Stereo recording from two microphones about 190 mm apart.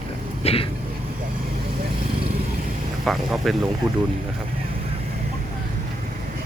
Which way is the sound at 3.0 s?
Centre (ahead or behind).